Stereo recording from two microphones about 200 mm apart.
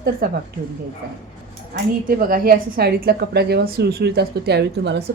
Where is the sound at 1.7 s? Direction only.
45° right (ahead or behind).